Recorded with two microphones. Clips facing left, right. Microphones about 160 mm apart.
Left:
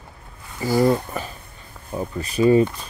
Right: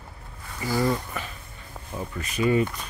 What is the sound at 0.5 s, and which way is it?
Speech, 35° left (ahead or behind).